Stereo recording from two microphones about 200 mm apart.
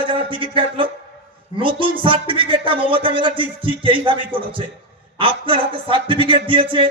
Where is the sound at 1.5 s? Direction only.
25° right (ahead or behind).